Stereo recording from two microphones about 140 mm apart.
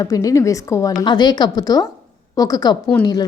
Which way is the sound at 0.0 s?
25° left (ahead or behind).